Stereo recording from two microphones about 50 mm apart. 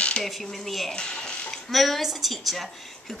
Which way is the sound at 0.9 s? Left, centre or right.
Centre.